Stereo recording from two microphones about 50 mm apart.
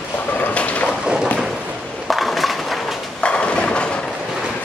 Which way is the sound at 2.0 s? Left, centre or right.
Centre.